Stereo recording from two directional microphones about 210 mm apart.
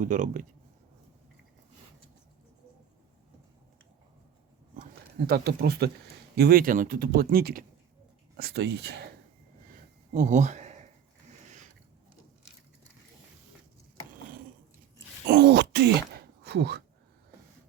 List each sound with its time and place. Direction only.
0.0 s speech: 35° right (ahead or behind)
4.8 s speech: 45° right (ahead or behind)
10.1 s speech: 35° right (ahead or behind)
14.9 s a sound: 50° right (ahead or behind)